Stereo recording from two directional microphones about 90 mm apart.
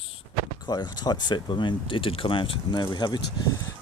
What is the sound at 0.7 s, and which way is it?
Speech, 50° left (ahead or behind).